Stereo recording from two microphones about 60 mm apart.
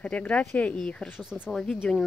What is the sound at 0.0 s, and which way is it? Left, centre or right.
Speech, left.